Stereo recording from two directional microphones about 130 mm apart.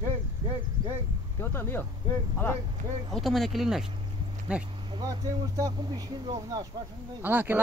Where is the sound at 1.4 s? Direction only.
15° left (ahead or behind).